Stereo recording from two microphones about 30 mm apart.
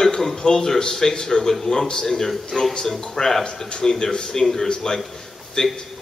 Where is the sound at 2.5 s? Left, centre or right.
Centre.